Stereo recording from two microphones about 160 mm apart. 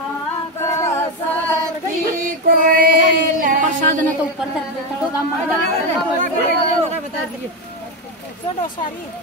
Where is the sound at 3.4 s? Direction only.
55° right (ahead or behind).